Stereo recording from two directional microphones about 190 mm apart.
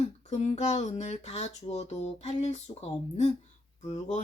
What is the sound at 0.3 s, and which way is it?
Speech, 35° left (ahead or behind).